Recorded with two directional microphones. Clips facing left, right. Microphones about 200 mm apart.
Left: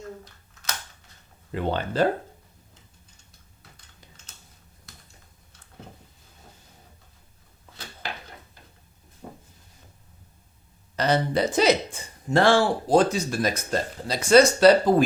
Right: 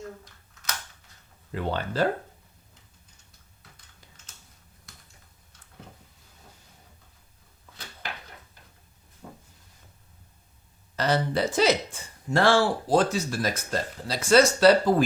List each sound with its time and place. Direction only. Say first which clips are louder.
1.5 s speech: left 3 dB; 20° left (ahead or behind)
9.2 s a sound: left 3 dB; 25° left (ahead or behind)
10.9 s speech: left 2 dB; 20° left (ahead or behind)